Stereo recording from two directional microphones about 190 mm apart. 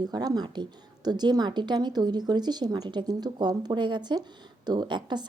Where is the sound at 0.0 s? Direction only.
20° right (ahead or behind).